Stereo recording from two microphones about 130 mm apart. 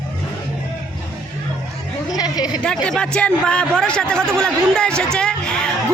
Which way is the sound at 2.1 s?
30° left (ahead or behind).